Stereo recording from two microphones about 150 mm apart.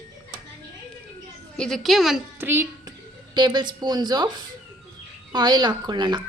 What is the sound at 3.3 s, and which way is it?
A woman's voice, 30° right (ahead or behind).